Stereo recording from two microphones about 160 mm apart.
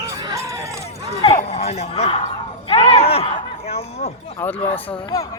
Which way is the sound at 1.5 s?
40° left (ahead or behind).